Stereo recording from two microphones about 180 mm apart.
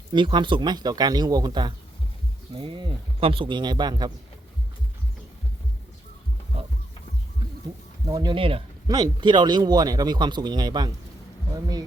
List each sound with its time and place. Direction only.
0.1 s speech: 25° right (ahead or behind)
8.0 s speech: 20° right (ahead or behind)